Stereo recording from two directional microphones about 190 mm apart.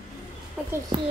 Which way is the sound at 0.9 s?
25° right (ahead or behind).